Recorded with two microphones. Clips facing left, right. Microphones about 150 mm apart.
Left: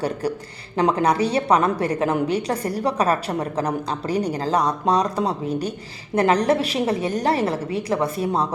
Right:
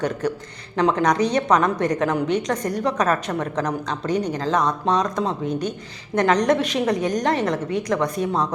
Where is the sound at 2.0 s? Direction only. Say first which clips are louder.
Even; 35° left (ahead or behind).